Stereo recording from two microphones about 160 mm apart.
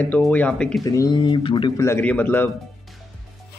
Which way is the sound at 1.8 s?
15° left (ahead or behind).